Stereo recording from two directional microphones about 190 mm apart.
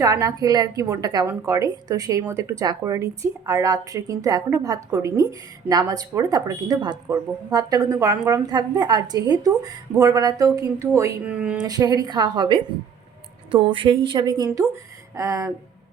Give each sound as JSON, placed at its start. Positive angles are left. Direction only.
{"t": 0.0, "sound": "speech", "side_deg": -15}
{"t": 11.6, "sound": "a woman's voice", "side_deg": -20}